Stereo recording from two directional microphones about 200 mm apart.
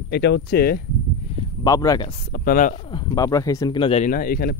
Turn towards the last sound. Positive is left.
turn(degrees=50)  # may be behind; listen again after turning